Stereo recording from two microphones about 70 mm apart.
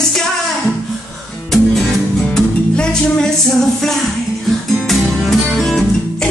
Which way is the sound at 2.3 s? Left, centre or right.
Centre.